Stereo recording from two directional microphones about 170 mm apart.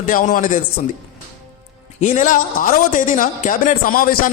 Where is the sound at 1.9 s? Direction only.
45° left (ahead or behind).